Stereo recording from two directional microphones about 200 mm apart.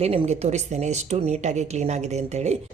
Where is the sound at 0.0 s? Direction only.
30° right (ahead or behind).